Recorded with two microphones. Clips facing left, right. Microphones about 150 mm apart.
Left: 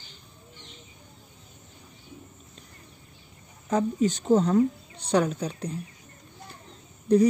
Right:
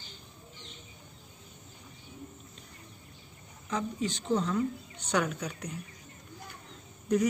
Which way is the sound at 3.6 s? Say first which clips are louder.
Left 9 dB; 45° left (ahead or behind).